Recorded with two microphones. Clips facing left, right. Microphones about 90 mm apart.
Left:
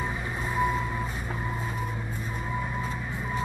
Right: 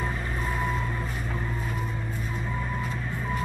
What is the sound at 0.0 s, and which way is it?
Vehicle, 5° left (ahead or behind).